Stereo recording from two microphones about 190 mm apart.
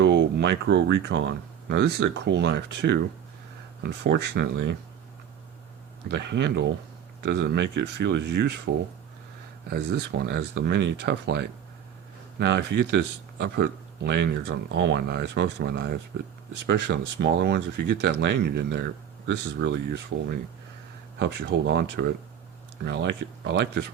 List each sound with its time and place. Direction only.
0.0 s speech: 65° right (ahead or behind)
6.1 s speech: 65° right (ahead or behind)
21.7 s speech: 60° right (ahead or behind)